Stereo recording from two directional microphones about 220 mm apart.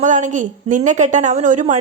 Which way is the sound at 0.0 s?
35° right (ahead or behind).